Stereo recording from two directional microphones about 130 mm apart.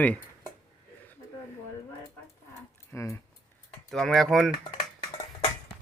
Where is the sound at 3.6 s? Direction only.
5° left (ahead or behind).